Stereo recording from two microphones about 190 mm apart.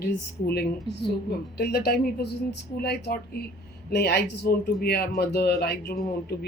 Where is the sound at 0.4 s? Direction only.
55° left (ahead or behind).